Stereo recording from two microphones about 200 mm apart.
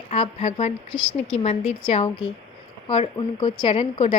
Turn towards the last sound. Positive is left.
turn(degrees=25)  # may be behind; listen again after turning